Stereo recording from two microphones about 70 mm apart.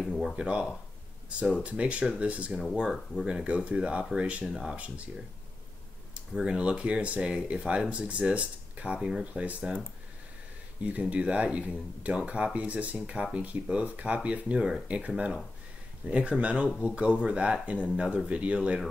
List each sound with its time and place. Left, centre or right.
0.4 s speech: centre
4.7 s speech: centre
6.1 s speech: centre
10.8 s speech: centre